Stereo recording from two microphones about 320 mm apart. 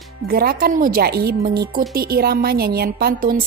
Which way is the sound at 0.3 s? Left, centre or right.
Right.